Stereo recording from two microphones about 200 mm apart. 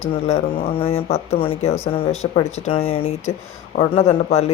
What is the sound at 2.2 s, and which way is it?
Speech, 30° left (ahead or behind).